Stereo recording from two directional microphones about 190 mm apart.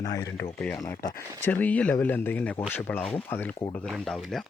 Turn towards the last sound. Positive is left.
turn(degrees=0)  # may be behind; listen again after turning